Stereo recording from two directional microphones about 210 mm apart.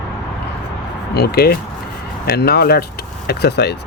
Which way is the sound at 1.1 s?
50° left (ahead or behind).